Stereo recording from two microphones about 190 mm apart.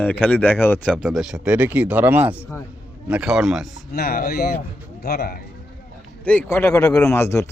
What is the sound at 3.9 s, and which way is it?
Speech, 55° left (ahead or behind).